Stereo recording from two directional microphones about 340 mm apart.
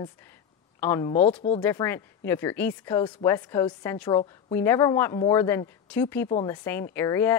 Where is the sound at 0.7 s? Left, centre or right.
Centre.